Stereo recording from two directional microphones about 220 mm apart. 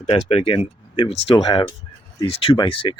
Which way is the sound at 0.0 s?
25° left (ahead or behind).